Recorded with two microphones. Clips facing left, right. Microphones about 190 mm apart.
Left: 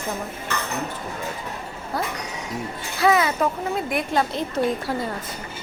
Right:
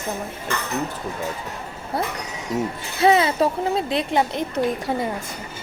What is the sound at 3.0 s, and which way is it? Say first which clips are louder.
Speech: right 2 dB; 25° right (ahead or behind).